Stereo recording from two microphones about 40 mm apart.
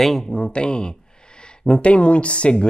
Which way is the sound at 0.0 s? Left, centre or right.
Centre.